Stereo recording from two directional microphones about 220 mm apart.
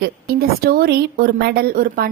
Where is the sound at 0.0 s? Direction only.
45° right (ahead or behind).